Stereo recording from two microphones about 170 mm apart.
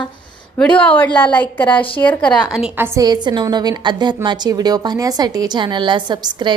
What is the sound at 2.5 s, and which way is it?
Speech, 10° right (ahead or behind).